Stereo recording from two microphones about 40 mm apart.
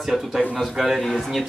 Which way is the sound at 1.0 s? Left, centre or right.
Centre.